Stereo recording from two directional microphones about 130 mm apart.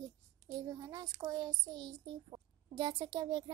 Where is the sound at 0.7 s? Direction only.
30° right (ahead or behind).